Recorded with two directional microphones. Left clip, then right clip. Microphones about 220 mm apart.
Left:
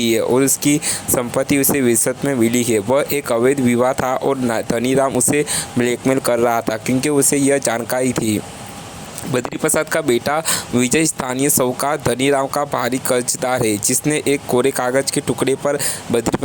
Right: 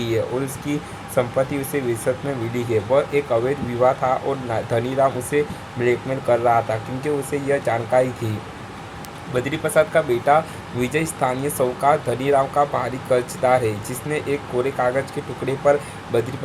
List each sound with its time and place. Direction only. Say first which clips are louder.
0.0 s speech: left 7 dB; 40° left (ahead or behind)